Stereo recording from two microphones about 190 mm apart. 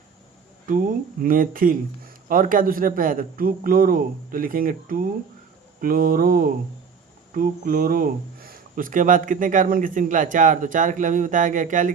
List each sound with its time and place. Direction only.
0.7 s speech: 45° right (ahead or behind)